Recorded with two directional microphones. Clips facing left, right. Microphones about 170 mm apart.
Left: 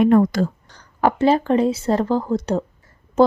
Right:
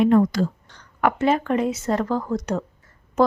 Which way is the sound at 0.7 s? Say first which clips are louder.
Left 4 dB; 35° left (ahead or behind).